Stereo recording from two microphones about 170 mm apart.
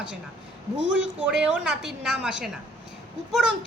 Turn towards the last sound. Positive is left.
turn(degrees=-5)  # may be behind; listen again after turning